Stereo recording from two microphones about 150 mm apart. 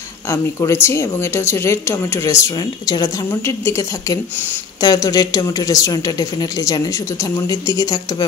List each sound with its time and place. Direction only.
0.3 s speech: 20° left (ahead or behind)